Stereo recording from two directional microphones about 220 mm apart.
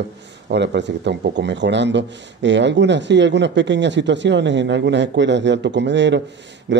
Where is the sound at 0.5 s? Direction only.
50° right (ahead or behind).